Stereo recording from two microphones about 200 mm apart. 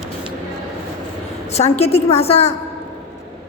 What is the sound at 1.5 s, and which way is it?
A woman's voice, 35° left (ahead or behind).